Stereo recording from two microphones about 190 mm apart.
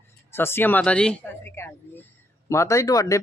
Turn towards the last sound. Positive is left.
turn(degrees=20)  # may be behind; listen again after turning